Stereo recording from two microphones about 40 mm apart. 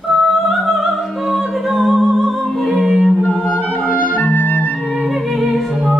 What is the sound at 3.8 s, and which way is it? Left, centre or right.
Clarinet, left.